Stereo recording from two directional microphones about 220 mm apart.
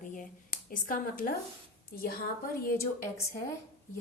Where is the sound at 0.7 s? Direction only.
40° left (ahead or behind).